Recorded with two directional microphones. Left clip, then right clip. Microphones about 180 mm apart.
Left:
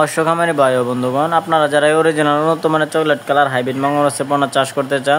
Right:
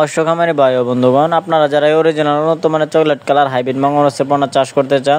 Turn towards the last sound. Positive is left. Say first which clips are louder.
# right 3 dB
turn(degrees=-30)  # may be behind; listen again after turning